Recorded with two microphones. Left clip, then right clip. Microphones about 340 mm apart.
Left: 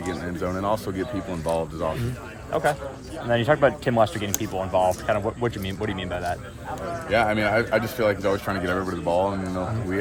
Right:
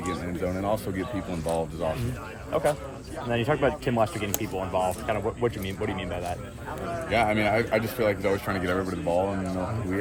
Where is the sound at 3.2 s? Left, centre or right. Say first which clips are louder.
Left 5 dB; left.